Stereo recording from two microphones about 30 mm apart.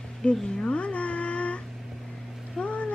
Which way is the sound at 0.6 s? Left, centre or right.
Left.